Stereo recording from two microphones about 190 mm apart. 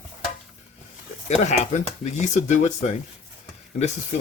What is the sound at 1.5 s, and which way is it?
Speech, 35° left (ahead or behind).